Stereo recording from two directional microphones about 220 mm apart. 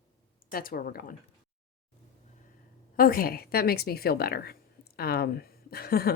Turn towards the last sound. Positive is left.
turn(degrees=45)  # may be behind; listen again after turning